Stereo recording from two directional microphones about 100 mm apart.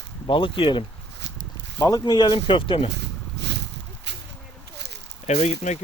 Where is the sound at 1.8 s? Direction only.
40° left (ahead or behind); by 2.8 s 60° left (ahead or behind).